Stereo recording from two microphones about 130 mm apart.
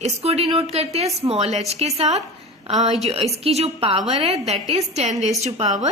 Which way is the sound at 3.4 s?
50° right (ahead or behind).